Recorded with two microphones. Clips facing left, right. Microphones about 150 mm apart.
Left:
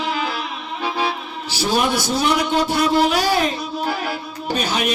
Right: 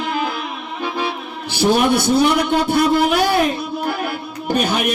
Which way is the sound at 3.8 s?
55° right (ahead or behind).